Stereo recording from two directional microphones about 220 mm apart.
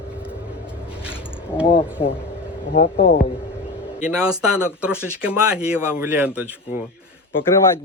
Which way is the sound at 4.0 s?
5° right (ahead or behind).